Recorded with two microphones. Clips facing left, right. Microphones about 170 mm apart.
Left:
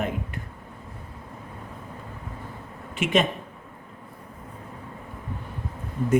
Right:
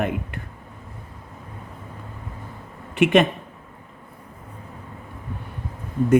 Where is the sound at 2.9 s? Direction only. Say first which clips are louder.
Right 6 dB; 65° right (ahead or behind).